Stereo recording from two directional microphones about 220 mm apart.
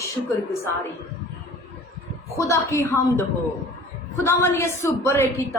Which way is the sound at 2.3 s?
15° left (ahead or behind).